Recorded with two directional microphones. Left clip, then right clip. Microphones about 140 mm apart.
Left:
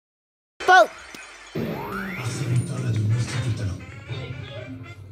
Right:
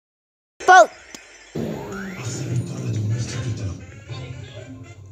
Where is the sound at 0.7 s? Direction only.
30° right (ahead or behind).